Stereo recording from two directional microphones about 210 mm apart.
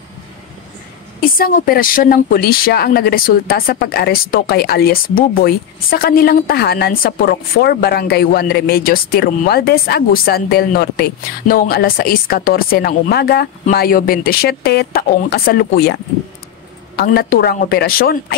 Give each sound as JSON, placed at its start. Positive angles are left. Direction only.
{"t": 1.2, "sound": "a woman's voice", "side_deg": 40}